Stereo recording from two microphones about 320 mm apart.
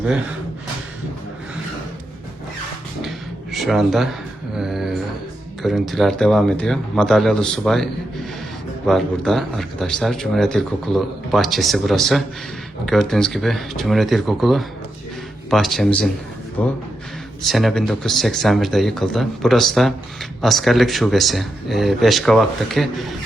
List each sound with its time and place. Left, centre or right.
3.5 s speech: centre
8.9 s speech: centre